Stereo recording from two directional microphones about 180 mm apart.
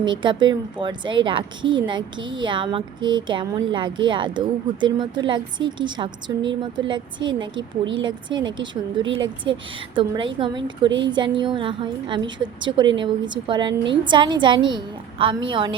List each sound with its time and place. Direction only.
0.0 s speech: 25° right (ahead or behind)